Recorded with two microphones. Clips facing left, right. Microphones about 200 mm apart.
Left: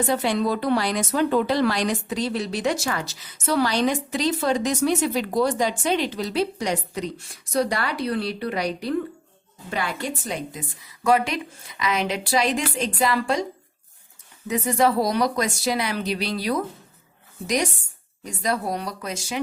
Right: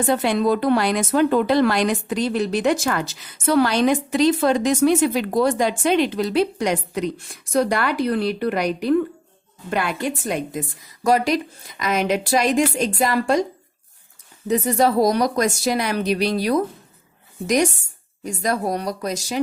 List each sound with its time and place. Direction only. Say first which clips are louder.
0.1 s a woman's voice: right 7 dB; 55° right (ahead or behind)
11.0 s speech: right 3 dB; 40° right (ahead or behind)
14.4 s speech: right 3 dB; 35° right (ahead or behind)